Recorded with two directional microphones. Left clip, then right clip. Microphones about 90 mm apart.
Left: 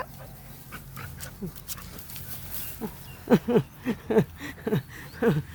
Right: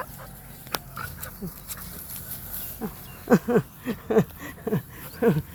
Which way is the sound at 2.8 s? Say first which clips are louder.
Right 2 dB; 10° left (ahead or behind).